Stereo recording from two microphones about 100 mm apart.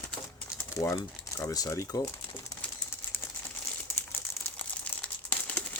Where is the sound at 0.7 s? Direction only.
30° left (ahead or behind).